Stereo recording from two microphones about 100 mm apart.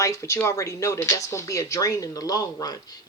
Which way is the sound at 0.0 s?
30° left (ahead or behind).